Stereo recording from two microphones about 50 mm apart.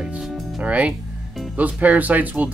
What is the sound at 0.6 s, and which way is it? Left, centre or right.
Speech, right.